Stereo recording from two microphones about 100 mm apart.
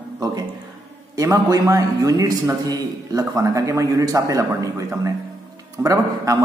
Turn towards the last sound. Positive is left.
turn(degrees=-35)  # may be behind; listen again after turning